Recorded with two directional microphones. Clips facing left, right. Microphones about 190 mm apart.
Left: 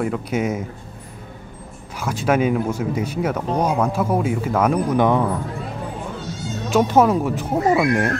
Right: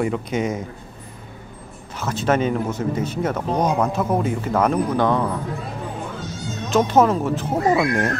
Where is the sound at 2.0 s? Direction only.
10° left (ahead or behind).